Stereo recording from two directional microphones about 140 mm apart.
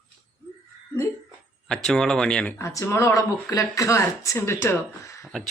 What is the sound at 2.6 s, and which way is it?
Speech, 20° left (ahead or behind).